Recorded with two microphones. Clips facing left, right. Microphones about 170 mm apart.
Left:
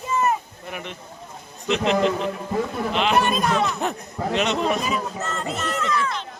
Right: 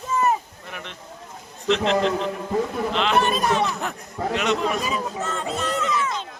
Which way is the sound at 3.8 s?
20° left (ahead or behind).